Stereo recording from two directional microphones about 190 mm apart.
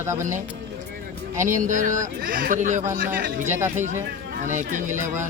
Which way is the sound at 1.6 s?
45° right (ahead or behind).